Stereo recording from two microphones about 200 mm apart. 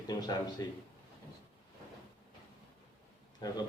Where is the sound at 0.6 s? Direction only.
20° left (ahead or behind).